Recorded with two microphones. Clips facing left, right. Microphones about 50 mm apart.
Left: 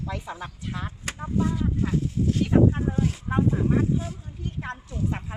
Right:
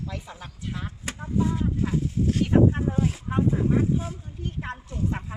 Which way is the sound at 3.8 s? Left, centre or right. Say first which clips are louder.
Even; centre.